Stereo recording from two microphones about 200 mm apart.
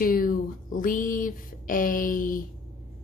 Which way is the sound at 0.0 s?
45° left (ahead or behind).